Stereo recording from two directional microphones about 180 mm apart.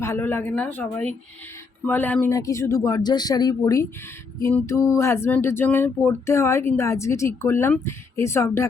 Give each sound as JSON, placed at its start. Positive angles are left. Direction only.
{"t": 0.0, "sound": "speech", "side_deg": 10}